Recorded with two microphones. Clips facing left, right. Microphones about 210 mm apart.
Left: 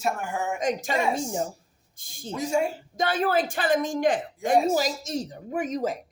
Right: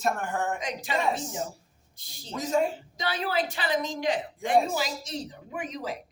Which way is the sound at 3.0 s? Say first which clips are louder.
Left 5 dB; 50° left (ahead or behind).